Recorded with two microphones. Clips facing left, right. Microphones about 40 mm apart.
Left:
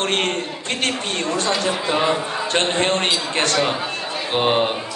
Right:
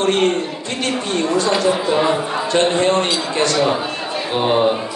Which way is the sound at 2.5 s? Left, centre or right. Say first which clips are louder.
Right 4 dB; left.